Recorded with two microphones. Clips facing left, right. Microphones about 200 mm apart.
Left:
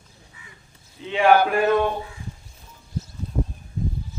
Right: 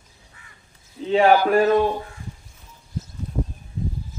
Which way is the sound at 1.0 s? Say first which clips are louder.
Right 3 dB; 40° right (ahead or behind).